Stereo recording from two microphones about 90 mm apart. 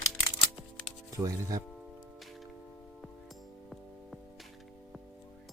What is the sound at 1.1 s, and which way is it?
Speech, 40° right (ahead or behind).